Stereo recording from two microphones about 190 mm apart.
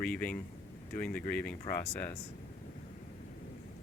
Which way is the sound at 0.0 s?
5° left (ahead or behind).